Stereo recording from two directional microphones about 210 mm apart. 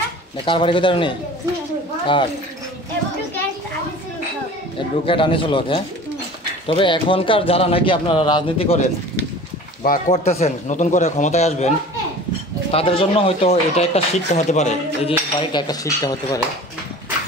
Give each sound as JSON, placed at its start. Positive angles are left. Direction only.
{"t": 0.5, "sound": "speech", "side_deg": 25}
{"t": 5.0, "sound": "speech", "side_deg": 25}
{"t": 9.8, "sound": "a man's voice", "side_deg": 35}
{"t": 12.7, "sound": "speech", "side_deg": 25}
{"t": 15.5, "sound": "speech", "side_deg": 20}